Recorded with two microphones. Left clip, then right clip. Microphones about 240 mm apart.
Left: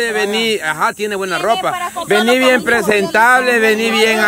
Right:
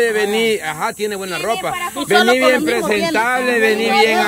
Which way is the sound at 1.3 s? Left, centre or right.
Left.